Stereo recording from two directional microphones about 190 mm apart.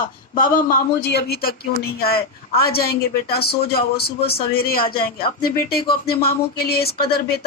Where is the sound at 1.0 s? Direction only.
60° left (ahead or behind).